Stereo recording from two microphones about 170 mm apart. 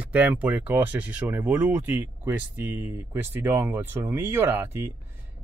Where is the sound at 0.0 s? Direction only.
10° right (ahead or behind).